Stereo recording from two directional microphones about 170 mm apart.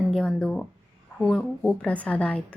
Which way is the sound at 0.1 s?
5° left (ahead or behind).